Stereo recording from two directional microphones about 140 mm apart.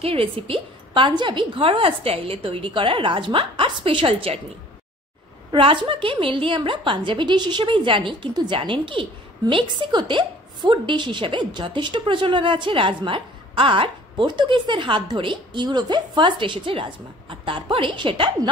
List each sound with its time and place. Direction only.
0.0 s a woman's voice: 40° right (ahead or behind)
5.5 s a woman's voice: 40° right (ahead or behind)